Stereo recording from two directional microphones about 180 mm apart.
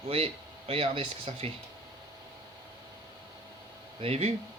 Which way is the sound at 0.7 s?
30° right (ahead or behind).